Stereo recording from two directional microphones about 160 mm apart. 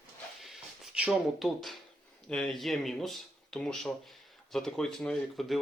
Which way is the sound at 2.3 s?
5° left (ahead or behind).